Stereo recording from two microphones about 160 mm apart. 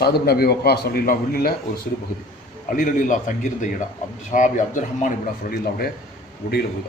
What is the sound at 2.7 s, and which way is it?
A man's voice, 55° left (ahead or behind).